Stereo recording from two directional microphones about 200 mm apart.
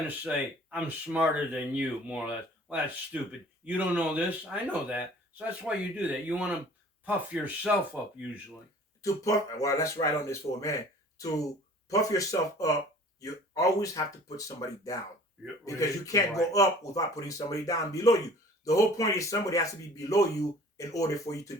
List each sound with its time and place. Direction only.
0.2 s speech: 5° right (ahead or behind)
9.0 s speech: 15° left (ahead or behind)
11.9 s speech: 15° left (ahead or behind)